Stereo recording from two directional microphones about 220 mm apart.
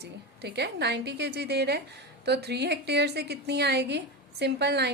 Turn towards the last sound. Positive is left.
turn(degrees=-50)  # may be behind; listen again after turning